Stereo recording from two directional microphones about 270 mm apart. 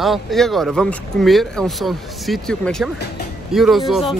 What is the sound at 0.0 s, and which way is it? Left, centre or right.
Speech, centre.